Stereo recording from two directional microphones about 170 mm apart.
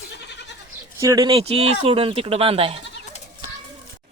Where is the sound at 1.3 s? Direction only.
35° right (ahead or behind).